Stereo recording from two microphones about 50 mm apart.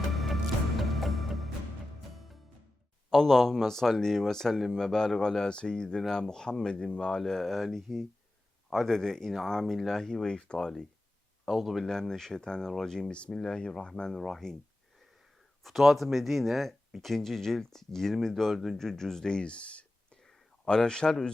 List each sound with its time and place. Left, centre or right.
0.1 s music: centre
3.1 s speech: centre
7.2 s speech: centre
11.5 s speech: centre
11.9 s speech: centre
13.1 s speech: left
15.6 s speech: centre